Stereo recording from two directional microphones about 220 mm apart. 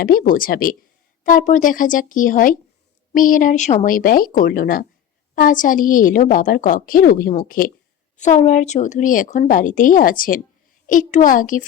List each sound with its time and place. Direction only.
0.0 s a woman's voice: 40° left (ahead or behind)